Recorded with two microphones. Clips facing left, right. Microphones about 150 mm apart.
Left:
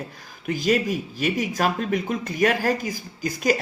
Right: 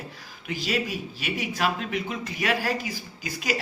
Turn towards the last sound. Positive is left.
turn(degrees=45)  # may be behind; listen again after turning